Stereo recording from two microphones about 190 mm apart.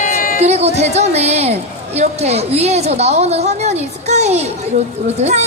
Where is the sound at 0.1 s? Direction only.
45° left (ahead or behind).